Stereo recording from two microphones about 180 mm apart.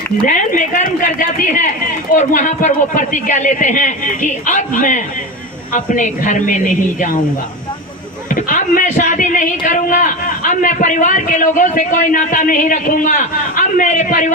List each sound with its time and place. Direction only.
0.3 s speech: 45° left (ahead or behind)
8.3 s speech: 50° left (ahead or behind)